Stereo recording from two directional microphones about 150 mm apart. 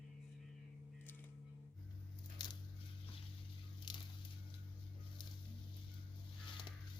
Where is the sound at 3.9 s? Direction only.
30° left (ahead or behind).